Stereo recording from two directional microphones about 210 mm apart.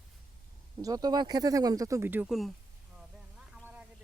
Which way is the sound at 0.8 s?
15° right (ahead or behind).